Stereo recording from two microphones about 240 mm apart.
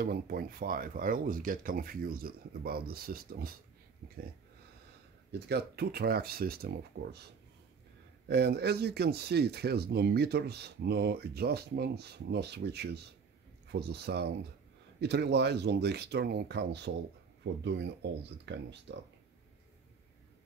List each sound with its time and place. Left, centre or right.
0.0 s speech: right
5.5 s speech: right
8.3 s speech: right